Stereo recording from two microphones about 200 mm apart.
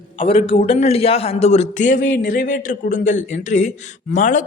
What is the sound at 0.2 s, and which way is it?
A man's voice, 30° left (ahead or behind).